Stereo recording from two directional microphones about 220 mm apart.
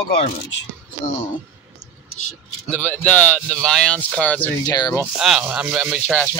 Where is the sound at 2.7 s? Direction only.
5° left (ahead or behind).